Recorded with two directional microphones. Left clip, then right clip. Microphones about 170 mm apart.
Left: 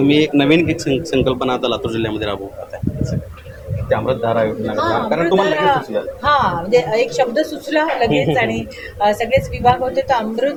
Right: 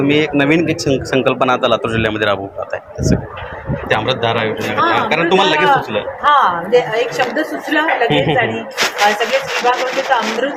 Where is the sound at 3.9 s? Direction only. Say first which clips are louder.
Right 2 dB; 35° right (ahead or behind).